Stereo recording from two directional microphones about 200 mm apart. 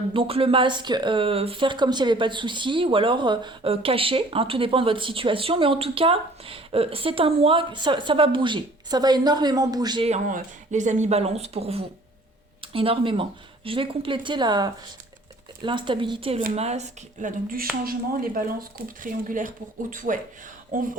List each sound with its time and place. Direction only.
0.1 s speech: 25° right (ahead or behind)
10.1 s speech: 40° right (ahead or behind)